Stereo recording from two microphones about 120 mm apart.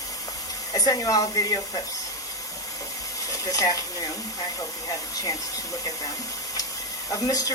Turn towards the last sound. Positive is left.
turn(degrees=30)  # may be behind; listen again after turning